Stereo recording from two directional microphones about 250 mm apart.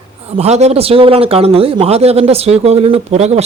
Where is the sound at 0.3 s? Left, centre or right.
Right.